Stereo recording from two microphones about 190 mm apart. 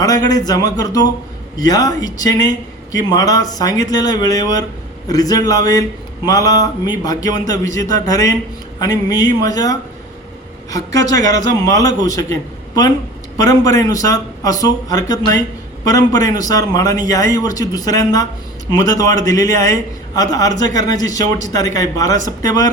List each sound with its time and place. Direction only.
0.0 s a man's voice: 20° left (ahead or behind)